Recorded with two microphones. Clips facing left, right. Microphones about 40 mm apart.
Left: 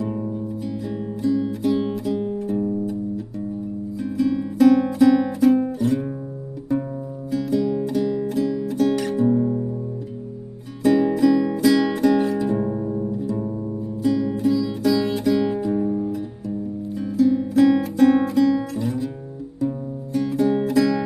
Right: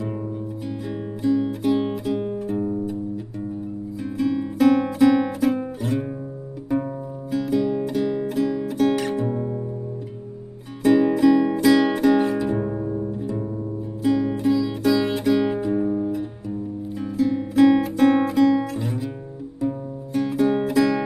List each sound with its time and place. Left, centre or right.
0.0 s music: centre
4.0 s music: centre
10.8 s music: centre
13.4 s music: centre
14.0 s music: right
20.1 s music: centre